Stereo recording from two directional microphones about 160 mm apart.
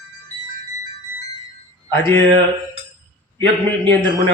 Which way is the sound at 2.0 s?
30° right (ahead or behind).